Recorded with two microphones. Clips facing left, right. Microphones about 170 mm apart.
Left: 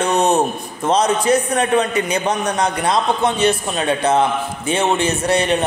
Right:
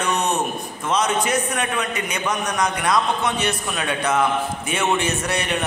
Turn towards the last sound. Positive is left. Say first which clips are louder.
# left 7 dB
turn(degrees=30)  # may be behind; listen again after turning